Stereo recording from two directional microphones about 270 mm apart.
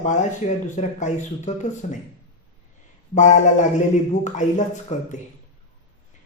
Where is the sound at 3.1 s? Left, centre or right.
Left.